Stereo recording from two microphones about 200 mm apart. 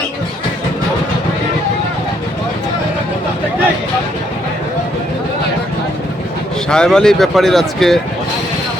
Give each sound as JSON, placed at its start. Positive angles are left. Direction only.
{"t": 6.7, "sound": "speech", "side_deg": 5}